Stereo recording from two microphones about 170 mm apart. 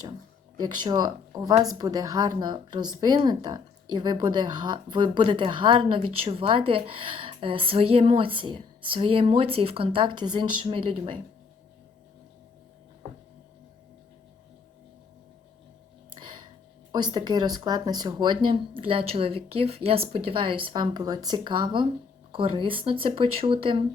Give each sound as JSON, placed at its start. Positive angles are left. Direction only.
{"t": 0.6, "sound": "speech", "side_deg": -25}
{"t": 16.1, "sound": "a sound", "side_deg": -25}
{"t": 16.9, "sound": "speech", "side_deg": -25}